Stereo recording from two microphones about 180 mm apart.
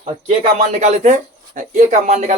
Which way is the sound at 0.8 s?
40° right (ahead or behind).